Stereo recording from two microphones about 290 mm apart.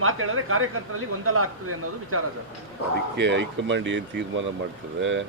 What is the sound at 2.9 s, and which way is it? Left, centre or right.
Speech, right.